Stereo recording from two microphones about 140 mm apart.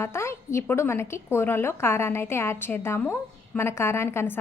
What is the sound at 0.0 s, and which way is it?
A woman's voice, 20° left (ahead or behind).